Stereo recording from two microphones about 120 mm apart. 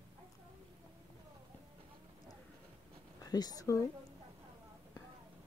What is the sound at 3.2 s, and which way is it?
Speech, 30° left (ahead or behind).